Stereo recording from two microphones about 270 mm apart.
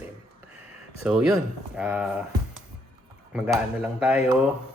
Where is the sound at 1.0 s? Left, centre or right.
Centre.